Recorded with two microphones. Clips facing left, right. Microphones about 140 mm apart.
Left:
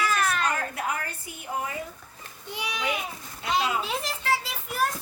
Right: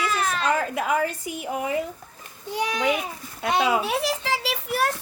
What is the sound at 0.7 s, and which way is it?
Speech, 90° right.